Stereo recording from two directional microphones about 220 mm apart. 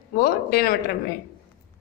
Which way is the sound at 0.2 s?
45° left (ahead or behind).